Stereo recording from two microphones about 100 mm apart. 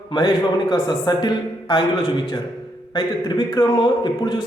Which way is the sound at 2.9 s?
45° left (ahead or behind).